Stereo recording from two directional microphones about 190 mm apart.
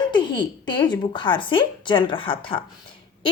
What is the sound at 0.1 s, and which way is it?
A woman's voice, 25° left (ahead or behind).